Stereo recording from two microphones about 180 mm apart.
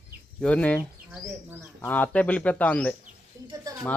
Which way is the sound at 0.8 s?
10° right (ahead or behind).